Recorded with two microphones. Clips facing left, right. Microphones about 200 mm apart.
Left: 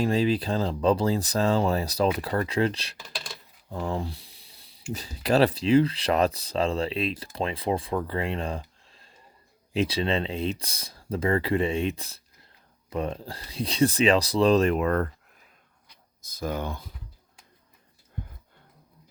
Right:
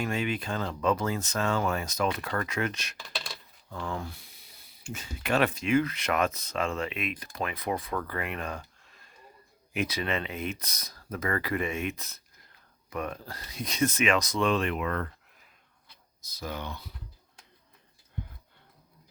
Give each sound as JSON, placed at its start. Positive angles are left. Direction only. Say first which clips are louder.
{"t": 0.0, "sound": "speech", "louder": "left 7 dB", "side_deg": 35}
{"t": 16.3, "sound": "speech", "louder": "left 6 dB", "side_deg": 50}